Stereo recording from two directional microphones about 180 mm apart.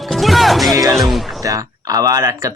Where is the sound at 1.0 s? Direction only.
Centre (ahead or behind).